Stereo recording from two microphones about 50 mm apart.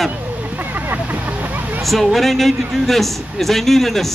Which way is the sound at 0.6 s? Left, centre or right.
Right.